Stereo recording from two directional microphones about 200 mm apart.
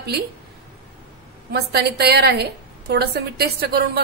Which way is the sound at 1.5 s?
55° right (ahead or behind).